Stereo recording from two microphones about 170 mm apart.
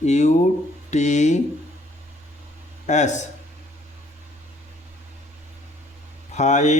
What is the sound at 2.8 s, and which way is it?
Speech, 45° left (ahead or behind).